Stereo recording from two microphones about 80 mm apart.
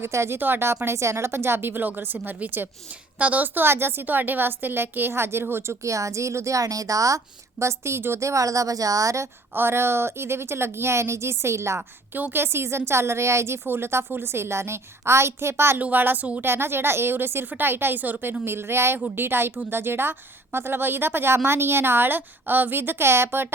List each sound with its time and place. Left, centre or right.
0.0 s a woman's voice: right
9.6 s a woman's voice: right
11.8 s a woman's voice: right
16.5 s a woman's voice: right